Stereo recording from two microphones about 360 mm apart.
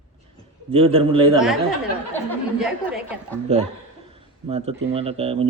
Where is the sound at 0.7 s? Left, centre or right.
Centre.